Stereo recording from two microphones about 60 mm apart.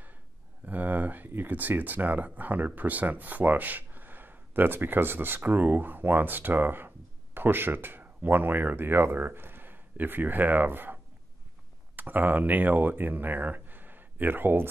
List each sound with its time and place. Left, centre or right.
0.7 s speech: right